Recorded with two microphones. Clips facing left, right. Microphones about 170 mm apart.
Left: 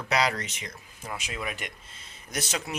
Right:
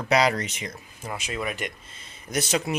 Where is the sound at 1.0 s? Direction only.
Centre (ahead or behind).